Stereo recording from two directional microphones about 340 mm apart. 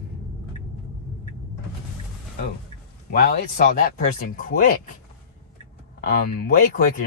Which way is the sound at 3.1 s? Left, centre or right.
Left.